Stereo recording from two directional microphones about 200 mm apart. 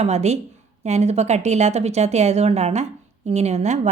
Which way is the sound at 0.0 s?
35° right (ahead or behind).